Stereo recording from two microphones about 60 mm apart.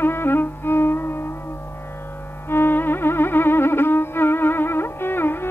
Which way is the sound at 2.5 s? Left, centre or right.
Left.